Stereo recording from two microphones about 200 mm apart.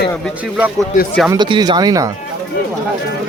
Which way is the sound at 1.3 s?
20° right (ahead or behind).